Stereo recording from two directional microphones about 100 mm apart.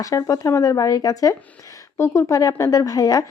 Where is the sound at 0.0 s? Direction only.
35° left (ahead or behind).